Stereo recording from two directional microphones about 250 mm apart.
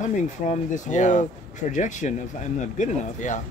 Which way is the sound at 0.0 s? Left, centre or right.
Left.